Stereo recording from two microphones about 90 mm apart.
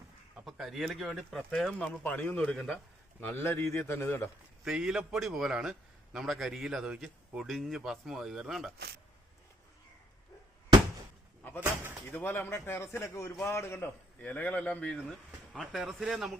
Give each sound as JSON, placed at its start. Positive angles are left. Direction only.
{"t": 0.5, "sound": "a man's voice", "side_deg": 0}
{"t": 2.0, "sound": "a man's voice", "side_deg": 20}
{"t": 2.3, "sound": "a man's voice", "side_deg": 10}
{"t": 4.6, "sound": "a man's voice", "side_deg": -5}
{"t": 11.6, "sound": "speech", "side_deg": -25}
{"t": 12.1, "sound": "a man's voice", "side_deg": 20}
{"t": 14.2, "sound": "speech", "side_deg": 15}